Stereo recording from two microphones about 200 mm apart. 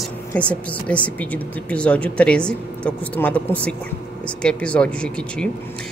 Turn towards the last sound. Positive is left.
turn(degrees=5)  # may be behind; listen again after turning